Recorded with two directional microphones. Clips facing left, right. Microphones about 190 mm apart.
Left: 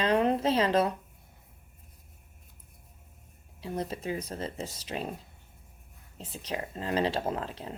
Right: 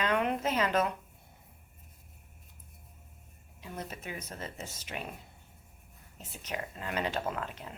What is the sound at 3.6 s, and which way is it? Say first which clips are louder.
Speech: left 8 dB; 35° left (ahead or behind).